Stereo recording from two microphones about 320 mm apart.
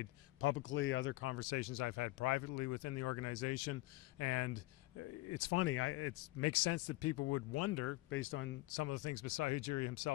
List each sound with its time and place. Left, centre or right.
0.0 s speech: left